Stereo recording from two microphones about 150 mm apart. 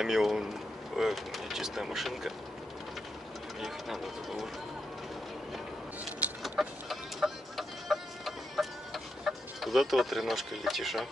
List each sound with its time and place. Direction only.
0.0 s speech: 5° right (ahead or behind)
3.6 s speech: centre (ahead or behind)
6.0 s music: 5° right (ahead or behind)